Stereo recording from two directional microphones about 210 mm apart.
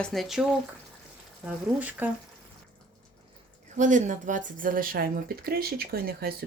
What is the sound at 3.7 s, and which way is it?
Speech, 35° right (ahead or behind).